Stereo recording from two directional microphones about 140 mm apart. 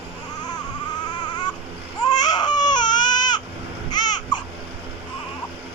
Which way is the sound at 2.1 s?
30° left (ahead or behind).